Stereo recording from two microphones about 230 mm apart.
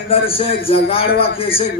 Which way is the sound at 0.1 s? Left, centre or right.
Left.